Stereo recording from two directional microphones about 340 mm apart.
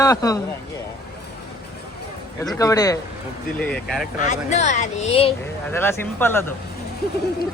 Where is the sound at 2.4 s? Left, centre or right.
Centre.